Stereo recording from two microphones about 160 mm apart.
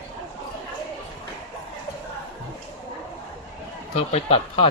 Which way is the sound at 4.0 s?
40° left (ahead or behind).